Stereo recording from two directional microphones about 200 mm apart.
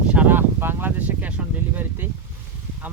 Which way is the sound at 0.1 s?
10° right (ahead or behind).